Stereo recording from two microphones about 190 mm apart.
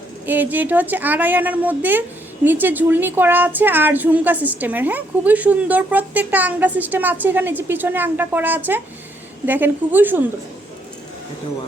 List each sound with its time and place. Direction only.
0.3 s a woman's voice: 10° right (ahead or behind)